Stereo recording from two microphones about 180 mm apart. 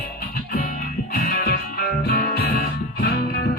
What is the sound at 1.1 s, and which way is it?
Music, 55° left (ahead or behind).